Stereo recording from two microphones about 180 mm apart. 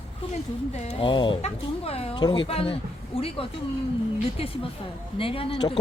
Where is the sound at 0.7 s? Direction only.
35° left (ahead or behind).